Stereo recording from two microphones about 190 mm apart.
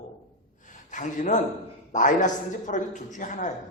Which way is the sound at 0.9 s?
40° left (ahead or behind).